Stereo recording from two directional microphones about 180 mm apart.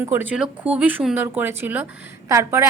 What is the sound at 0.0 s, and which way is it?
A woman's voice, 10° right (ahead or behind).